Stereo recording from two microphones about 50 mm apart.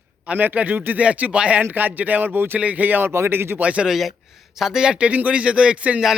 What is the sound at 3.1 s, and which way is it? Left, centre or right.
Speech, right.